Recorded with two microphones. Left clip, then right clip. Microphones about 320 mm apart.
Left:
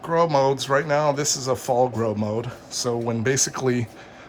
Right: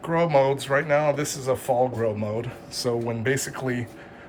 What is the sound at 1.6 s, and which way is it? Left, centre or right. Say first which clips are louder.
Speech: left 2 dB; left.